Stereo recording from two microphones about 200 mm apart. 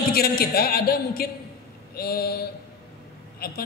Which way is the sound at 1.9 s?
50° left (ahead or behind).